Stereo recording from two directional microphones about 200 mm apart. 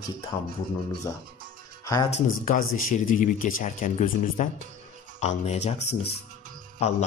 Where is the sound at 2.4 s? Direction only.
45° left (ahead or behind).